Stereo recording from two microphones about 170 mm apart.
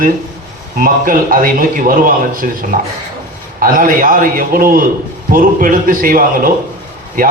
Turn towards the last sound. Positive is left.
turn(degrees=-55)  # may be behind; listen again after turning